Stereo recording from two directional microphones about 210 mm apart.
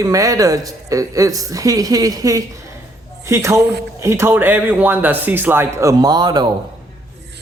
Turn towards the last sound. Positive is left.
turn(degrees=-20)  # may be behind; listen again after turning